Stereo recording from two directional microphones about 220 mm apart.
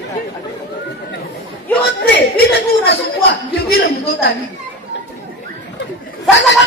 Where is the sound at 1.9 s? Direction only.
50° left (ahead or behind).